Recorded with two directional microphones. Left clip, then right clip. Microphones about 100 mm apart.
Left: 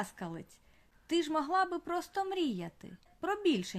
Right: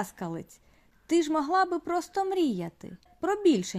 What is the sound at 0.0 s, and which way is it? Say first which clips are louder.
Speech: right 6 dB; 35° right (ahead or behind).